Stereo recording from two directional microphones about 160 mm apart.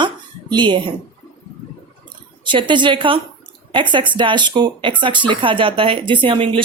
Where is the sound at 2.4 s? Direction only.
30° right (ahead or behind).